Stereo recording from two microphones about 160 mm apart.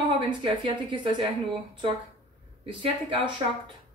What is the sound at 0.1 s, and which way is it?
Speech, 30° right (ahead or behind).